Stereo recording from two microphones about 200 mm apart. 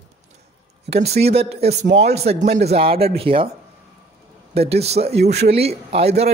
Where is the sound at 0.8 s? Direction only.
30° right (ahead or behind).